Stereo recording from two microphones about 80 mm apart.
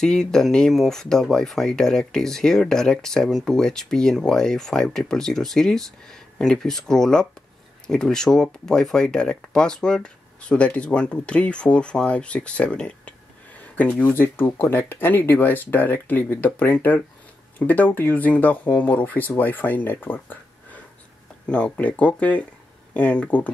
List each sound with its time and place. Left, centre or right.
0.0 s speech: centre; by 20.8 s left
21.5 s speech: centre